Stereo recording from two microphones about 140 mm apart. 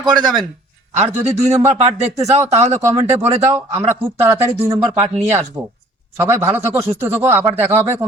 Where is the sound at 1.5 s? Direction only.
25° right (ahead or behind).